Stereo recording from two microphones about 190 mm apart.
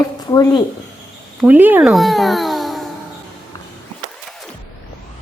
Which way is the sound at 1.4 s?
10° right (ahead or behind).